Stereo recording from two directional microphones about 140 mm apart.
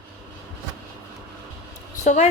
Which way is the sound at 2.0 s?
55° left (ahead or behind).